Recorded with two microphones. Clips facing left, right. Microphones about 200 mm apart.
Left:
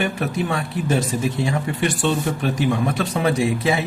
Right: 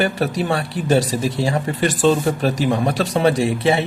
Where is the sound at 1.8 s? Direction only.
90° right.